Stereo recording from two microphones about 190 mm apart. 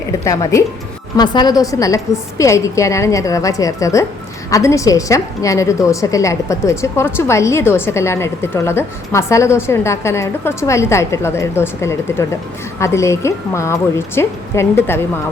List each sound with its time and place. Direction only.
1.1 s a woman's voice: 20° left (ahead or behind)